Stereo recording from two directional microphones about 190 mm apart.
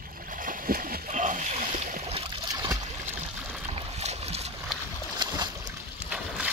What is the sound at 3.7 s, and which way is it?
Boat, 35° right (ahead or behind).